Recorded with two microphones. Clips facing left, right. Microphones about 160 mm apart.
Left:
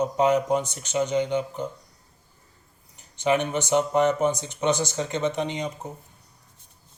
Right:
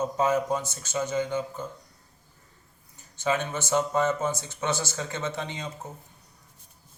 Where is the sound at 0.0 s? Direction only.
15° left (ahead or behind).